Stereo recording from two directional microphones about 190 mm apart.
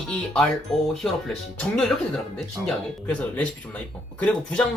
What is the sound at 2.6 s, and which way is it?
Speech, 10° left (ahead or behind).